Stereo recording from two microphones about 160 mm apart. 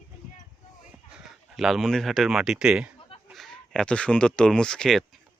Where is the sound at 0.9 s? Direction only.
5° right (ahead or behind).